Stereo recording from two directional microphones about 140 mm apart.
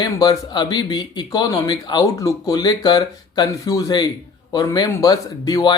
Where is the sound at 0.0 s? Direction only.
25° left (ahead or behind).